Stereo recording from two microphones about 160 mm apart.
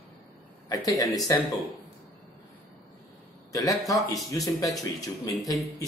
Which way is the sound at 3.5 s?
20° left (ahead or behind).